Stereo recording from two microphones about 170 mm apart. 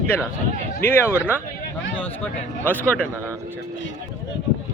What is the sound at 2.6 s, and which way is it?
Speech, 10° left (ahead or behind).